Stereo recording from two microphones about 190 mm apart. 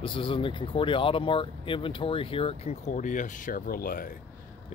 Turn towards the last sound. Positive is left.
turn(degrees=50)  # may be behind; listen again after turning